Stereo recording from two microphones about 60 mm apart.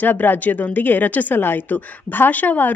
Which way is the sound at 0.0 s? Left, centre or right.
Left.